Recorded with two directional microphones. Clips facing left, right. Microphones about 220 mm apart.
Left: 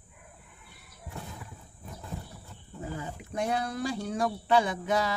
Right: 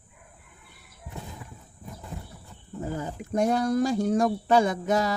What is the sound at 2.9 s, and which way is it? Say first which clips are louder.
Speech: right 7 dB; 45° right (ahead or behind).